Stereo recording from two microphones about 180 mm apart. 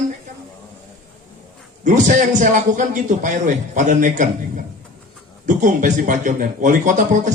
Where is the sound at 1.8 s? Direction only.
45° right (ahead or behind).